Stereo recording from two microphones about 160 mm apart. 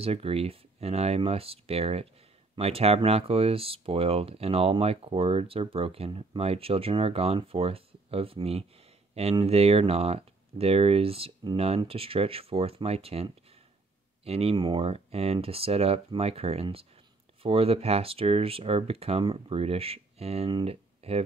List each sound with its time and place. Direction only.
0.0 s speech: 40° right (ahead or behind)